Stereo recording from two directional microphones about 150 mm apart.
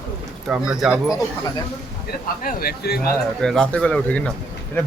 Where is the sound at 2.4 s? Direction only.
75° left (ahead or behind); by 3.0 s 90° left.